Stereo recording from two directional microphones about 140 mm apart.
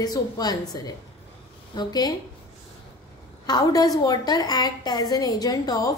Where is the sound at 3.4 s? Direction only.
30° left (ahead or behind).